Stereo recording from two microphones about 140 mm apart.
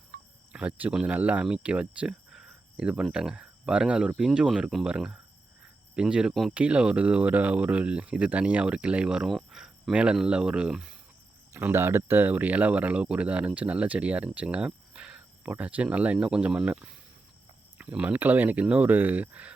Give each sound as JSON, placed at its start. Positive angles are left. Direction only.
{"t": 0.1, "sound": "cricket", "side_deg": -90}
{"t": 0.5, "sound": "speech", "side_deg": -10}
{"t": 11.5, "sound": "speech", "side_deg": -15}